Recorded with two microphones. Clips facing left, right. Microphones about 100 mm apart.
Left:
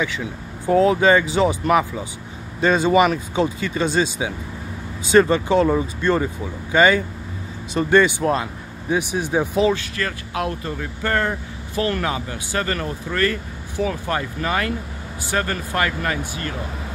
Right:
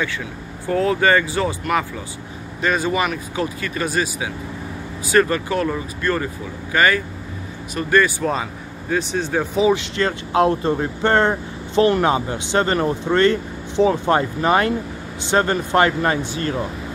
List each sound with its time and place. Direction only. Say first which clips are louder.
0.0 s speech: left 1 dB; 15° left (ahead or behind)
2.6 s speech: left 4 dB; 30° left (ahead or behind)
8.2 s speech: left 1 dB; centre (ahead or behind)
8.8 s speech: even; 15° left (ahead or behind)
9.7 s speech: right 4 dB; 25° right (ahead or behind)